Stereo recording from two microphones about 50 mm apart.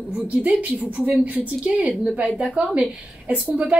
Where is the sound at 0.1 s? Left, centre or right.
Right.